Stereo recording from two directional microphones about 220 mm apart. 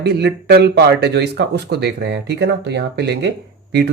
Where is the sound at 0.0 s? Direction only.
50° right (ahead or behind).